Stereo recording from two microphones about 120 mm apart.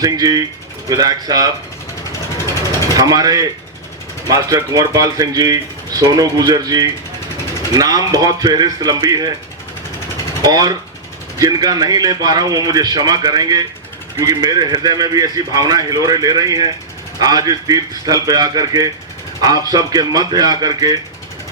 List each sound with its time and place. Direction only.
0.0 s a man's voice: 30° right (ahead or behind)
2.9 s a man's voice: 30° right (ahead or behind)
10.4 s a man's voice: 35° right (ahead or behind)